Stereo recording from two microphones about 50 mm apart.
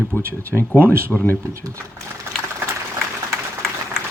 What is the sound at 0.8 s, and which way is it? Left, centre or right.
Speech, right.